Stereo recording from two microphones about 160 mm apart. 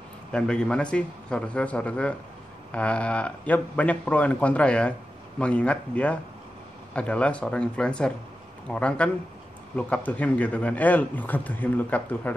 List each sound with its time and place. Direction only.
0.3 s a man's voice: 5° left (ahead or behind)